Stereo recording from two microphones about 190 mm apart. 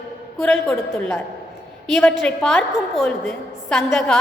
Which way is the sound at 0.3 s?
5° left (ahead or behind).